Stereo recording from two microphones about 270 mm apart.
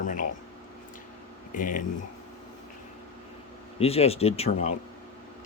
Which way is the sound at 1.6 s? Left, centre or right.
Left.